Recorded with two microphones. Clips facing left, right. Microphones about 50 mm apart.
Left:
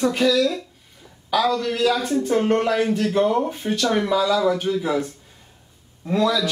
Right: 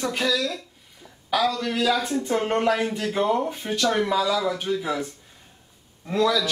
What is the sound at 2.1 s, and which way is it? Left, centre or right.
Speech, centre.